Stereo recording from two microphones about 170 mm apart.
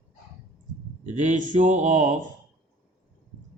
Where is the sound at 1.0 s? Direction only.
45° right (ahead or behind).